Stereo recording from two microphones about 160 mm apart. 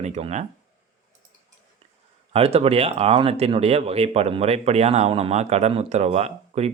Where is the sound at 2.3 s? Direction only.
40° right (ahead or behind).